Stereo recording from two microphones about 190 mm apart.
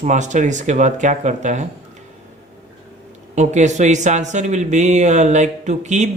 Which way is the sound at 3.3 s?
40° right (ahead or behind).